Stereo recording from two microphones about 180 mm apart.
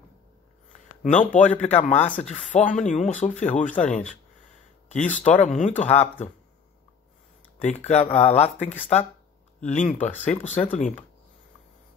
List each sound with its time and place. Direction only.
1.0 s speech: 40° left (ahead or behind)
4.8 s a sound: 40° left (ahead or behind)
5.2 s speech: 40° left (ahead or behind)
7.8 s speech: 35° left (ahead or behind)